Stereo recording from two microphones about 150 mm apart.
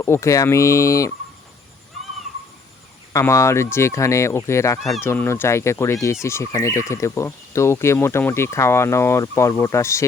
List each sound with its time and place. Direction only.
0.0 s speech: 20° left (ahead or behind)
3.1 s speech: 20° left (ahead or behind)